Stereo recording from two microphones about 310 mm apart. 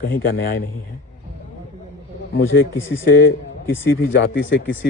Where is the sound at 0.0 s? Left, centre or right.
Left.